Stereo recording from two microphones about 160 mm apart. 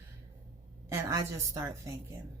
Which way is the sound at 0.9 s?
20° right (ahead or behind).